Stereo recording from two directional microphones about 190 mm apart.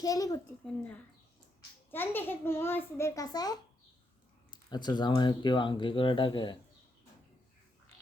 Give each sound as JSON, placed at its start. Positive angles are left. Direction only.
{"t": 0.0, "sound": "a child's voice", "side_deg": 20}
{"t": 1.9, "sound": "a child's voice", "side_deg": 10}